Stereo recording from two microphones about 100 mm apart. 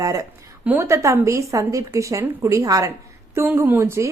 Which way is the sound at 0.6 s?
20° right (ahead or behind).